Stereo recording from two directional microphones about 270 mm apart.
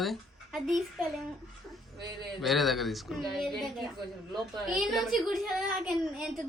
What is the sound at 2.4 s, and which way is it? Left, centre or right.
A woman's voice, centre.